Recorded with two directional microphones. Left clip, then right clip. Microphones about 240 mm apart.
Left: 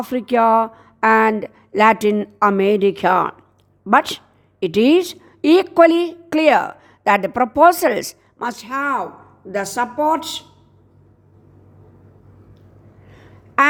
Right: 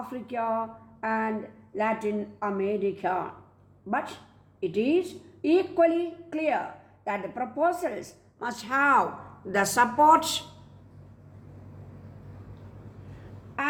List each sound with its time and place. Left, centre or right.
0.0 s speech: left
4.6 s a woman's voice: left
8.5 s a woman's voice: centre